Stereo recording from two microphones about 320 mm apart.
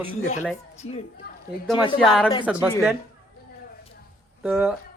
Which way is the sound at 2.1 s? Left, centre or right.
Centre.